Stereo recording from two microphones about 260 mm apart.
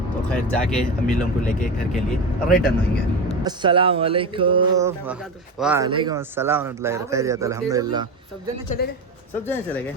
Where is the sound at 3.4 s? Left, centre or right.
Centre.